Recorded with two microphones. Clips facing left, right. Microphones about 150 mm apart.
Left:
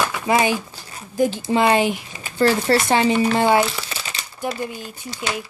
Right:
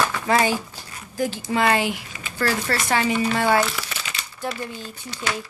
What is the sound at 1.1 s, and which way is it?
A woman's voice, 20° left (ahead or behind).